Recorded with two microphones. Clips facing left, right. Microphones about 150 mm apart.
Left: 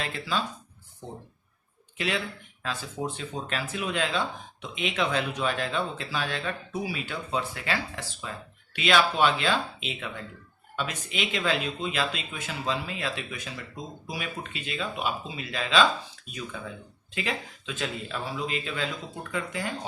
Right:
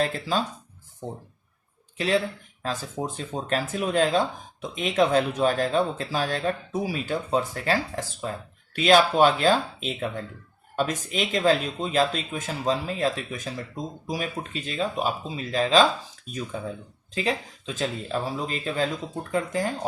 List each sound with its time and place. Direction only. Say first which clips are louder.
0.0 s speech: right 5 dB; 40° right (ahead or behind)
2.0 s speech: right 6 dB; 40° right (ahead or behind)